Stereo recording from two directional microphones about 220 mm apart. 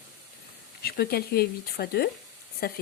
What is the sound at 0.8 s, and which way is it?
Speech, 45° left (ahead or behind).